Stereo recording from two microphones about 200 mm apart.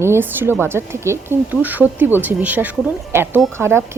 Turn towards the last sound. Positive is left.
turn(degrees=-10)  # may be behind; listen again after turning